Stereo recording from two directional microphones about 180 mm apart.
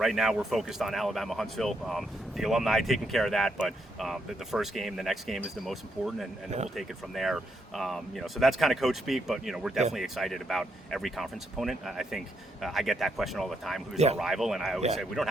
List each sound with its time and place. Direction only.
0.0 s speech: centre (ahead or behind)
13.9 s speech: 35° right (ahead or behind)
14.2 s speech: centre (ahead or behind)